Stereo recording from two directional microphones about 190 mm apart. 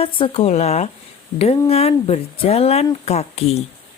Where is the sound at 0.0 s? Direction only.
30° left (ahead or behind).